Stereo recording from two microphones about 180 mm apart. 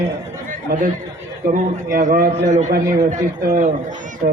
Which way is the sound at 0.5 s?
45° right (ahead or behind).